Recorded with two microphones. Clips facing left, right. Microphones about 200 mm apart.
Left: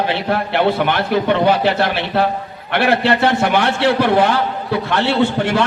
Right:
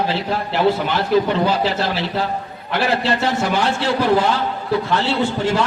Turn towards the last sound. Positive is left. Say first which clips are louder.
# left 3 dB
turn(degrees=65)  # may be behind; listen again after turning